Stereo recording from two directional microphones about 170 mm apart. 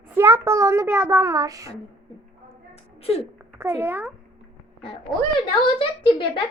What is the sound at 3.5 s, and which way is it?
Speech, 15° right (ahead or behind).